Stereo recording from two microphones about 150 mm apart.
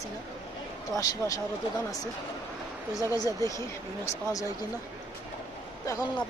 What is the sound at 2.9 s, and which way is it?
Speech, 20° left (ahead or behind).